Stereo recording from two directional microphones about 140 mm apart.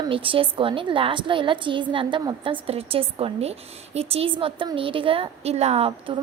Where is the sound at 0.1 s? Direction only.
40° right (ahead or behind).